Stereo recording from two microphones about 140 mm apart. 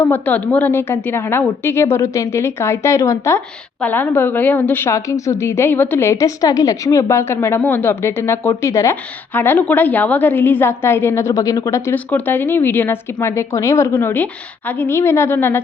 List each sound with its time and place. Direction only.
0.0 s a woman's voice: 10° left (ahead or behind)